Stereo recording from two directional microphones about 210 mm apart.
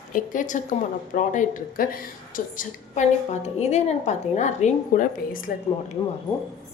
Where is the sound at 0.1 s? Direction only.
40° left (ahead or behind).